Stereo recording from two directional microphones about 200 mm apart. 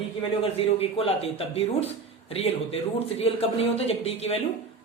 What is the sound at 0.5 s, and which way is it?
A man's voice, 30° left (ahead or behind).